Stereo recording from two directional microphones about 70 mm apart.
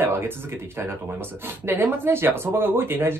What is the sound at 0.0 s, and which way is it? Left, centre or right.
Speech, right.